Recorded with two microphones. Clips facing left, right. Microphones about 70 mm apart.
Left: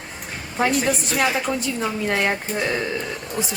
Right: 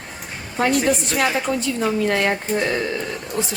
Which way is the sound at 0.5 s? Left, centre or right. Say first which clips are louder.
Right 2 dB; centre.